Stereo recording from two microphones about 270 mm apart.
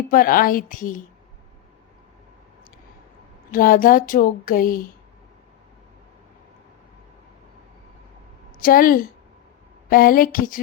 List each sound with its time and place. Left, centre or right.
0.1 s speech: left
3.5 s speech: left
8.5 s a woman's voice: left